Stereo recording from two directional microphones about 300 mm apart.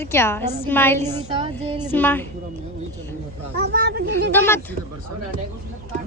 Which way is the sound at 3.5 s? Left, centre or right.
Right.